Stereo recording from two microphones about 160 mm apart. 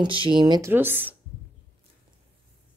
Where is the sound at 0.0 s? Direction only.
30° right (ahead or behind).